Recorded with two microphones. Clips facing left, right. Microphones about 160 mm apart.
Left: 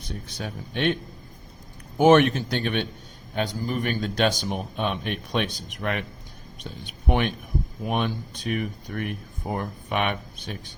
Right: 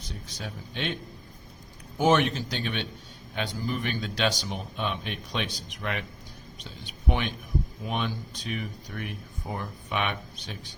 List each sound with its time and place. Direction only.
0.0 s speech: 60° left (ahead or behind)
2.0 s speech: 60° left (ahead or behind)
3.3 s speech: 45° left (ahead or behind)